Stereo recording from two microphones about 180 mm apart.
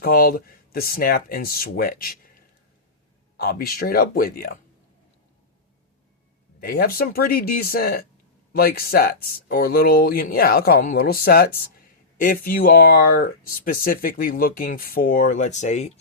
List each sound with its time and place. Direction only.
0.0 s speech: 55° left (ahead or behind)
3.3 s speech: 55° left (ahead or behind)
6.6 s speech: 55° left (ahead or behind); by 15.9 s 40° left (ahead or behind)